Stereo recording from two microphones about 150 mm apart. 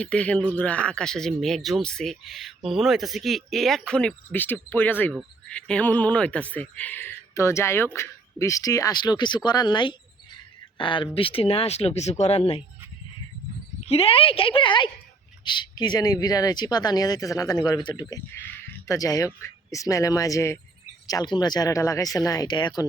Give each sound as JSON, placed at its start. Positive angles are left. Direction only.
{"t": 0.0, "sound": "speech", "side_deg": 5}
{"t": 13.8, "sound": "speech", "side_deg": 40}
{"t": 18.3, "sound": "a sound", "side_deg": 15}
{"t": 18.9, "sound": "speech", "side_deg": 25}